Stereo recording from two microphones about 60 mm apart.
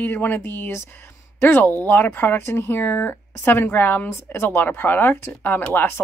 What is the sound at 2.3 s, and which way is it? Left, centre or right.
Speech, left.